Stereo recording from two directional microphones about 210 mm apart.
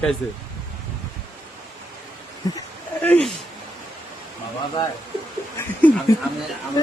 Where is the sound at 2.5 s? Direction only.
10° left (ahead or behind).